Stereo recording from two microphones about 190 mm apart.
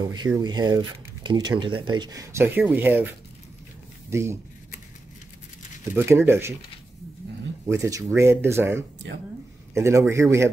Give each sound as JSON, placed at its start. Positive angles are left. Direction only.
{"t": 0.1, "sound": "speech", "side_deg": -20}
{"t": 4.1, "sound": "speech", "side_deg": -15}
{"t": 5.9, "sound": "speech", "side_deg": -10}
{"t": 7.6, "sound": "speech", "side_deg": -15}